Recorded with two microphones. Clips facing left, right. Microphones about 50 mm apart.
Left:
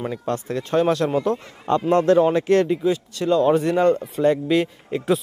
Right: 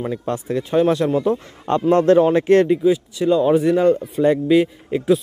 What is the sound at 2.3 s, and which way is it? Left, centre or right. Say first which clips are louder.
Speech: right 4 dB; right.